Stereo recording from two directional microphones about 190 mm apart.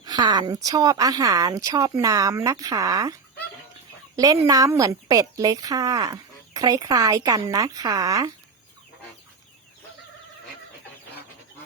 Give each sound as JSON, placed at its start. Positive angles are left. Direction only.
{"t": 0.0, "sound": "speech", "side_deg": -20}